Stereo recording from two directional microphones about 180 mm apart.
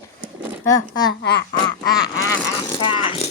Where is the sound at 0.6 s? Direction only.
20° left (ahead or behind).